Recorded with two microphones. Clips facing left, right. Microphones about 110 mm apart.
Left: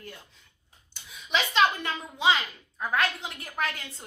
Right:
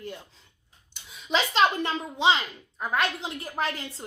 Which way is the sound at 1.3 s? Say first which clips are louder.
Right 1 dB; 30° right (ahead or behind).